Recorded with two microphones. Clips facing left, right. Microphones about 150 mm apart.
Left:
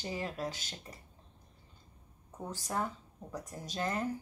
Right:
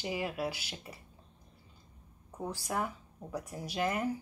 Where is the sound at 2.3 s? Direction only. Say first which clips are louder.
Right 1 dB; 10° right (ahead or behind).